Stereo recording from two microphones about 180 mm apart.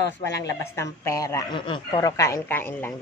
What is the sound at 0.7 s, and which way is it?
A woman's voice, 15° left (ahead or behind).